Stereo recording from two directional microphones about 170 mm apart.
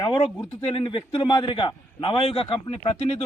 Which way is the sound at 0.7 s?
30° left (ahead or behind).